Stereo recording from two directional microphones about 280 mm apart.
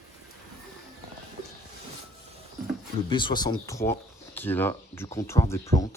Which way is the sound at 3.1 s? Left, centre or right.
Centre.